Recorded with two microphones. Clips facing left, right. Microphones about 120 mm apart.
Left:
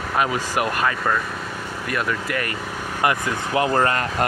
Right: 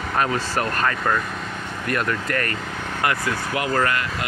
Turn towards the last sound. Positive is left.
turn(degrees=35)  # may be behind; listen again after turning